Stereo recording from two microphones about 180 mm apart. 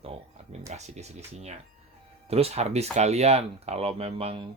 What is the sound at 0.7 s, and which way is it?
Speech, 40° right (ahead or behind).